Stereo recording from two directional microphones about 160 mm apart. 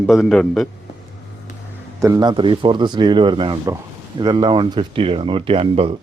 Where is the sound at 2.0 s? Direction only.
20° right (ahead or behind).